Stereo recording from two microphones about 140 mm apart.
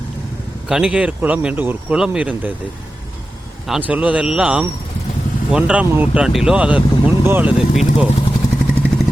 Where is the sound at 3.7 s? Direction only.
10° right (ahead or behind).